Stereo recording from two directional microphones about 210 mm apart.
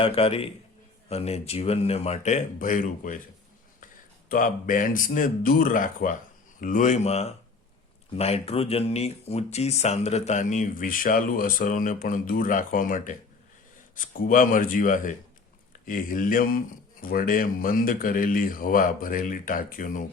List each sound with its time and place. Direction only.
0.0 s speech: 25° left (ahead or behind)
4.3 s speech: 40° left (ahead or behind)